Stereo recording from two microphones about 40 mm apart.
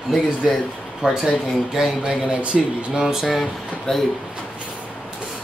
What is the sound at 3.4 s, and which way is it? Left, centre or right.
Speech, centre.